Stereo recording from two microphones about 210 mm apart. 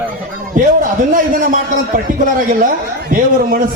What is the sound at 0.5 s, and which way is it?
A man's voice, 40° right (ahead or behind).